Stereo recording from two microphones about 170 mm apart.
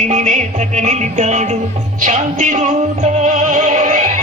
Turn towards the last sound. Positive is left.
turn(degrees=-45)  # may be behind; listen again after turning